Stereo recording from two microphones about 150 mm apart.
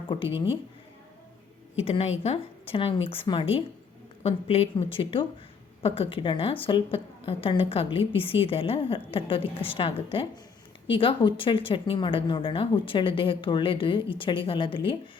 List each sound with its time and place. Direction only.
0.1 s a woman's voice: 35° left (ahead or behind)
1.8 s a woman's voice: 40° left (ahead or behind)